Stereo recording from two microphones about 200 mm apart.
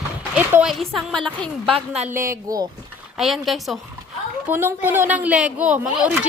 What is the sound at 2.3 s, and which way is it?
Speech, 20° right (ahead or behind).